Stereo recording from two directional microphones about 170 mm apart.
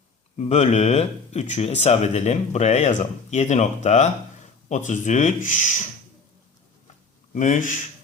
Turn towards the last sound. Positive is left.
turn(degrees=50)  # may be behind; listen again after turning